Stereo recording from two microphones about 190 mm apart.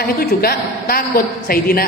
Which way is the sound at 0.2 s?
55° left (ahead or behind).